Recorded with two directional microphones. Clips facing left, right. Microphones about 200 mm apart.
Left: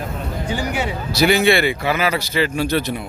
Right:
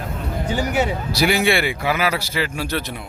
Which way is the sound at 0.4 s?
45° right (ahead or behind).